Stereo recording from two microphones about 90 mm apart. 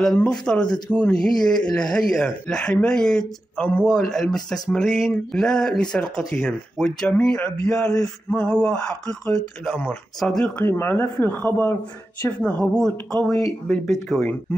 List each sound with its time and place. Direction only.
0.0 s speech: 5° left (ahead or behind)
10.6 s speech: 25° left (ahead or behind); by 14.3 s 5° left (ahead or behind)